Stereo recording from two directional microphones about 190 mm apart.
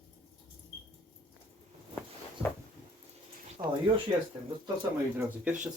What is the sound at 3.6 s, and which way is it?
Speech, 25° right (ahead or behind).